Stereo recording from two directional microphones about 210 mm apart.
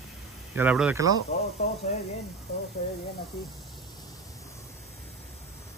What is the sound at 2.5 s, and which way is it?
Speech, 50° left (ahead or behind).